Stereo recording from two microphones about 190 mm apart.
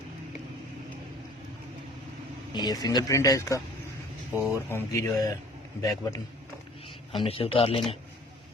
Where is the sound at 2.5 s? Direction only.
20° left (ahead or behind).